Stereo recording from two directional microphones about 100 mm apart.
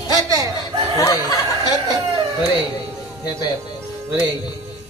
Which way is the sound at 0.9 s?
35° left (ahead or behind).